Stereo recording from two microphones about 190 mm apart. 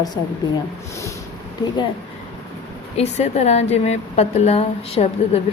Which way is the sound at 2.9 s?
35° left (ahead or behind).